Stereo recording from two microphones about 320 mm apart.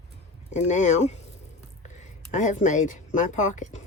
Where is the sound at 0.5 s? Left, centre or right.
Left.